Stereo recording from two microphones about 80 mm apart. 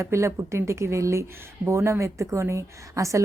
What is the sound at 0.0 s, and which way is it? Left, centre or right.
A woman's voice, right.